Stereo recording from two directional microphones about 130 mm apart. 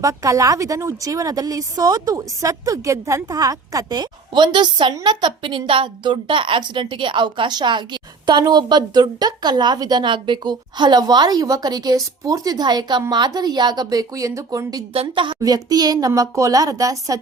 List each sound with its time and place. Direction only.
0.0 s a woman's voice: 25° right (ahead or behind)